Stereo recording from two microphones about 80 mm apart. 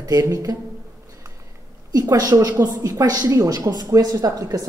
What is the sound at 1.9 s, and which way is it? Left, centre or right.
A man's voice, right.